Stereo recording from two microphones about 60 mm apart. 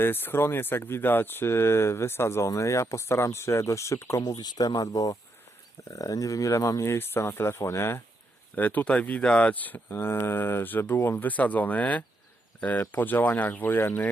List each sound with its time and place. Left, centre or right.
0.0 s speech: left
2.5 s speech: left
4.3 s speech: left
5.9 s speech: left
6.8 s speech: left
8.5 s speech: left
9.9 s speech: left